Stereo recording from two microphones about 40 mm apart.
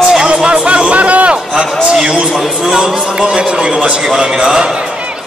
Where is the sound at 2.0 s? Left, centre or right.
Centre.